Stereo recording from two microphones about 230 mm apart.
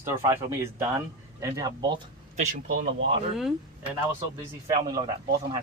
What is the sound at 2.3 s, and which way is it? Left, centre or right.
Speech, right.